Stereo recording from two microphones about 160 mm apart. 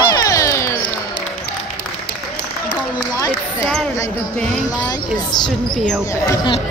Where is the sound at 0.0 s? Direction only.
20° left (ahead or behind).